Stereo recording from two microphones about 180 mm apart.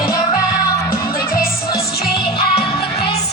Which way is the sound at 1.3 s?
55° left (ahead or behind).